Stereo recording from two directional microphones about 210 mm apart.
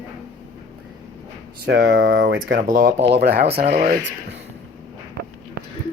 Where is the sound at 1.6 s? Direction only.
50° right (ahead or behind).